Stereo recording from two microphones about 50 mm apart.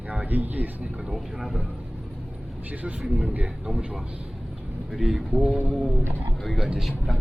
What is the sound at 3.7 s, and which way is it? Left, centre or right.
Speech, centre.